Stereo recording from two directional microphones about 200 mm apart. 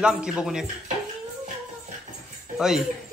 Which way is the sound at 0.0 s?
5° right (ahead or behind).